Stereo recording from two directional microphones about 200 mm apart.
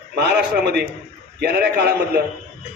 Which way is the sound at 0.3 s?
55° right (ahead or behind).